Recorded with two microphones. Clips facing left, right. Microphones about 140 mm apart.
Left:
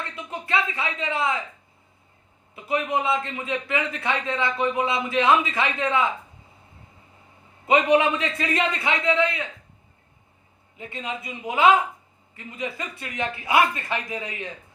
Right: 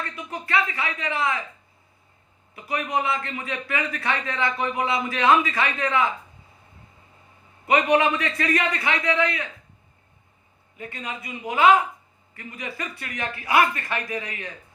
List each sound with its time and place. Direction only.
0.2 s speech: 20° left (ahead or behind)
2.6 s a man's voice: 20° left (ahead or behind)
7.7 s a man's voice: 20° left (ahead or behind)
10.8 s a man's voice: 20° left (ahead or behind)